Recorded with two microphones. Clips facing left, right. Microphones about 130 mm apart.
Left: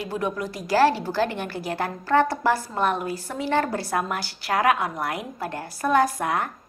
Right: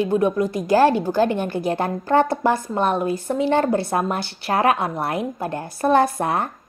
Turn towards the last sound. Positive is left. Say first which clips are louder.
# right 3 dB
turn(degrees=-30)  # may be behind; listen again after turning